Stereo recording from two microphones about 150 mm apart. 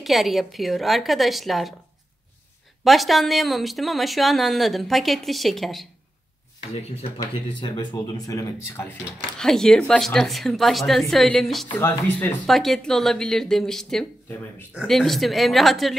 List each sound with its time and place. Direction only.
0.0 s speech: centre (ahead or behind)
2.8 s speech: centre (ahead or behind)
6.7 s speech: 45° left (ahead or behind)
7.2 s speech: 25° left (ahead or behind)
9.4 s speech: 5° left (ahead or behind)
11.8 s speech: 15° left (ahead or behind)
12.4 s speech: centre (ahead or behind)